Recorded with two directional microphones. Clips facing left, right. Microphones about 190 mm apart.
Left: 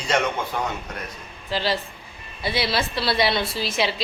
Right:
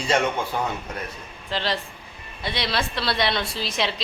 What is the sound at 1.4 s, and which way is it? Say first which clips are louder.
A woman's voice: left 2 dB; 5° left (ahead or behind).